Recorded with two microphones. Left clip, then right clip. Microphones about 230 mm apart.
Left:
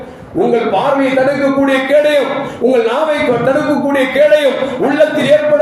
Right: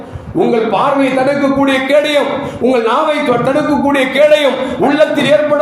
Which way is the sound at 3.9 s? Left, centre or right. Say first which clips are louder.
Even; right.